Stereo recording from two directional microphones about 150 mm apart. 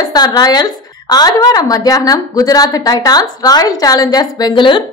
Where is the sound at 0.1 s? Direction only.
25° left (ahead or behind).